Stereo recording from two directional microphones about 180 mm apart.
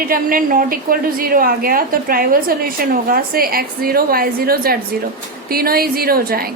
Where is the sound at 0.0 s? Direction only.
55° right (ahead or behind).